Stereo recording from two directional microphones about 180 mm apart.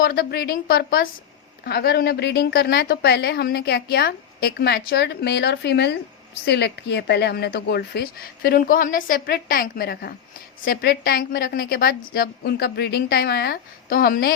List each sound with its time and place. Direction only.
0.0 s a woman's voice: 55° left (ahead or behind)